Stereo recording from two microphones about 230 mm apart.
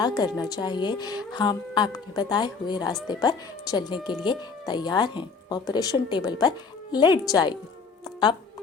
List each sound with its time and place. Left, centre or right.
0.0 s speech: centre